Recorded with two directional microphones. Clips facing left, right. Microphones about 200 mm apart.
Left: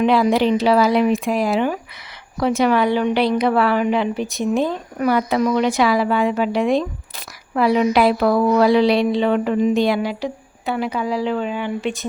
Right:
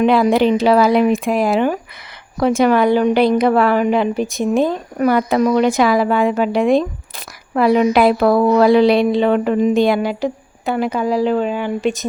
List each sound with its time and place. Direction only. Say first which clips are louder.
0.0 s a woman's voice: right 3 dB; 50° right (ahead or behind)